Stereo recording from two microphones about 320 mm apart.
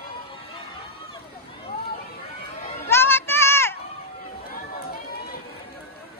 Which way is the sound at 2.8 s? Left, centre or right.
Centre.